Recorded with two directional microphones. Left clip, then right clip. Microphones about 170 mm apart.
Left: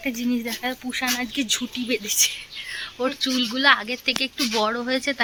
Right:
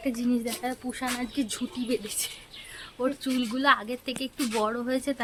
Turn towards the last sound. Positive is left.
turn(degrees=5)  # may be behind; listen again after turning